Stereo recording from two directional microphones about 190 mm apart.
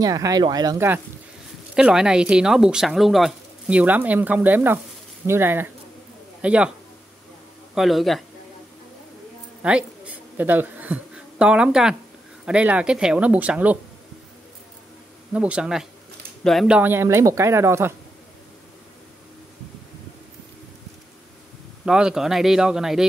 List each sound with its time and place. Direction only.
0.0 s speech: 20° right (ahead or behind)
7.7 s speech: centre (ahead or behind)
9.6 s speech: 5° right (ahead or behind)
15.3 s speech: 5° right (ahead or behind)
21.8 s speech: 5° right (ahead or behind)